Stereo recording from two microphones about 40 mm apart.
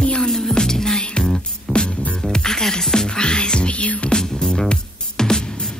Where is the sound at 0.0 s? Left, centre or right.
Left.